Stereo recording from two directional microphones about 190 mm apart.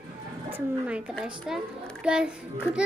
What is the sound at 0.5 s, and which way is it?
A child's voice, 5° right (ahead or behind).